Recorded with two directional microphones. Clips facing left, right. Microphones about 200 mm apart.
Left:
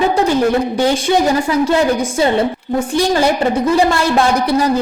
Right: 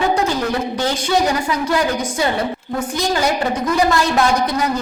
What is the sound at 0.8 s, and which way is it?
Speech, 15° left (ahead or behind).